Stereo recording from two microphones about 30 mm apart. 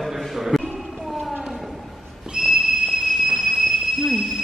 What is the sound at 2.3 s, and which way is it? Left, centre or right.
Train, centre.